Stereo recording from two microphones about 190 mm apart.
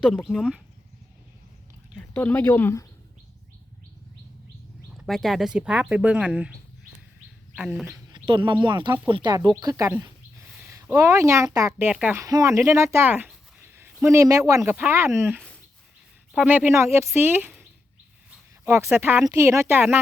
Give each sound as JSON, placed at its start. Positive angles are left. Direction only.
{"t": 0.0, "sound": "speech", "side_deg": 0}
{"t": 2.0, "sound": "speech", "side_deg": 10}
{"t": 4.9, "sound": "speech", "side_deg": 0}
{"t": 7.5, "sound": "speech", "side_deg": -5}
{"t": 8.1, "sound": "bird", "side_deg": -25}
{"t": 8.6, "sound": "a woman's voice", "side_deg": -25}